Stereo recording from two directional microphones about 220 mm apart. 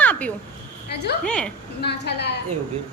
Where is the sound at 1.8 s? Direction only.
50° left (ahead or behind).